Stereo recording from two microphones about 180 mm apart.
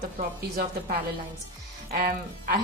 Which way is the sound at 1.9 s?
55° right (ahead or behind).